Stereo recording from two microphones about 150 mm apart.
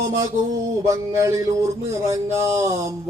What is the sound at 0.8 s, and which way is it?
Speech, 20° right (ahead or behind).